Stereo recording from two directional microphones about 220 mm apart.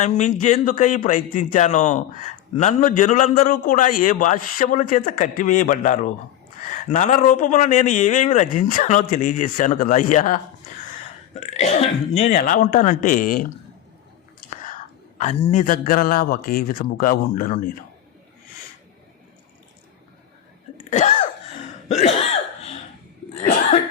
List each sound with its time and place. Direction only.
0.0 s speech: 35° left (ahead or behind)
14.4 s whispering: 40° left (ahead or behind)
15.2 s speech: 30° left (ahead or behind)
20.9 s a sound: 30° left (ahead or behind)
21.8 s cough: 30° left (ahead or behind)
23.3 s cough: 30° left (ahead or behind)